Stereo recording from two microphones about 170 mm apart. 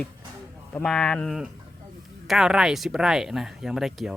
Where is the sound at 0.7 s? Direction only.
5° left (ahead or behind).